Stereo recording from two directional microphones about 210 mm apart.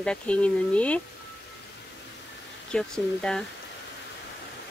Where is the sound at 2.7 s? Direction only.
5° left (ahead or behind).